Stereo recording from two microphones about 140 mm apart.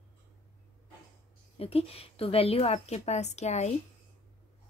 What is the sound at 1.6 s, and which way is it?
A woman's voice, 45° left (ahead or behind).